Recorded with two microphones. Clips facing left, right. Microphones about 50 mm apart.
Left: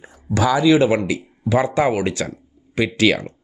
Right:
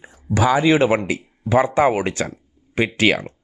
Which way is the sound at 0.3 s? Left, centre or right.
Right.